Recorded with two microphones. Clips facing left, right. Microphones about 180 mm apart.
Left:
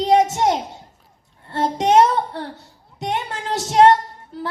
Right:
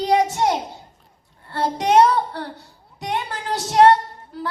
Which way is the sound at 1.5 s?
20° left (ahead or behind).